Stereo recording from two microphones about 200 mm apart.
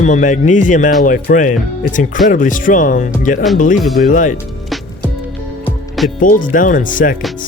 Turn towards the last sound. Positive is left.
turn(degrees=40)  # may be behind; listen again after turning